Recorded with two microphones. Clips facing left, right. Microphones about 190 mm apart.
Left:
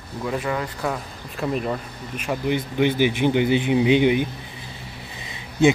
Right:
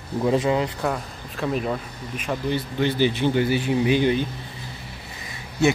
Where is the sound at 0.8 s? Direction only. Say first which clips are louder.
Right 1 dB; centre (ahead or behind).